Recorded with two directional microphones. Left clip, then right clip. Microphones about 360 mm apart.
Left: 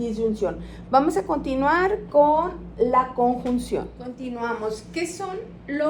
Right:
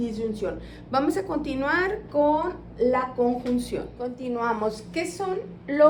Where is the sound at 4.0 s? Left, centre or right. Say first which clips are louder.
Right 2 dB; centre.